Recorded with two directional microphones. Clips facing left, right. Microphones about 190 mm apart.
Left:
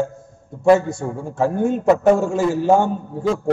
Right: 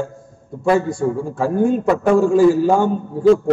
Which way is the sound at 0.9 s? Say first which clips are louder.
Right 3 dB; 25° left (ahead or behind).